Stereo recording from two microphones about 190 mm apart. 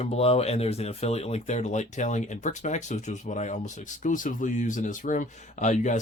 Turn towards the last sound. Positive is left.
turn(degrees=40)  # may be behind; listen again after turning